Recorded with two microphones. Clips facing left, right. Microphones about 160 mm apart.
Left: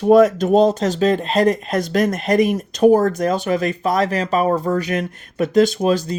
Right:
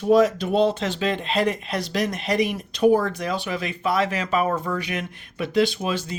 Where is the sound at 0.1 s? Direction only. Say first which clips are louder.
Left 6 dB; 50° left (ahead or behind).